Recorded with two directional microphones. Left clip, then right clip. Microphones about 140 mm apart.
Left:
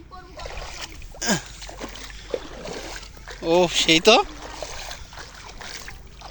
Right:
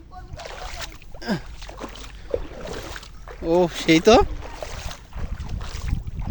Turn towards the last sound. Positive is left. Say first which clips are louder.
# left 2 dB
turn(degrees=15)  # may be behind; listen again after turning